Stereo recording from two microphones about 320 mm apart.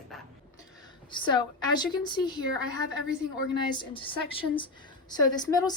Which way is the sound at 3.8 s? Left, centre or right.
Centre.